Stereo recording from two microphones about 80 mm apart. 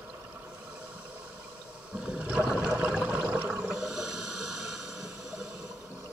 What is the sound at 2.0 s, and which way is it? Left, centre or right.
Toilet flush, centre.